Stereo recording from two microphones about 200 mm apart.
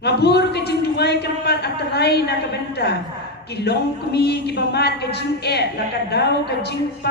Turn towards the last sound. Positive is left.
turn(degrees=55)  # may be behind; listen again after turning